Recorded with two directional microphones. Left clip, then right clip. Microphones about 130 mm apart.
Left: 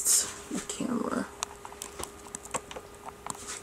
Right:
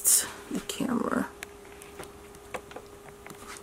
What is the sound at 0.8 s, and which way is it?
Speech, 45° right (ahead or behind).